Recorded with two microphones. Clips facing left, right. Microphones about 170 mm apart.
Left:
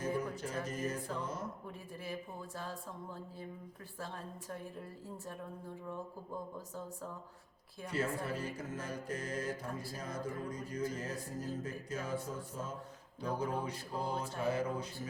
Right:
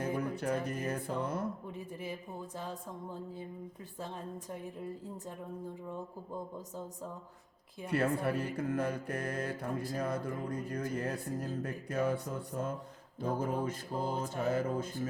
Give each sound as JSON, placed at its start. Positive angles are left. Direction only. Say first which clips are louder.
{"t": 0.0, "sound": "music", "louder": "right 3 dB", "side_deg": -60}
{"t": 1.6, "sound": "a sound", "louder": "right 4 dB", "side_deg": -20}
{"t": 7.9, "sound": "speech", "louder": "right 5 dB", "side_deg": -60}
{"t": 13.2, "sound": "mantra", "louder": "right 3 dB", "side_deg": -50}